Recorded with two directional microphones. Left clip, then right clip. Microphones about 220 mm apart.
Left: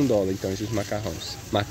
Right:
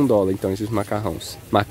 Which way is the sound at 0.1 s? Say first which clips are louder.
Right 5 dB; 30° right (ahead or behind).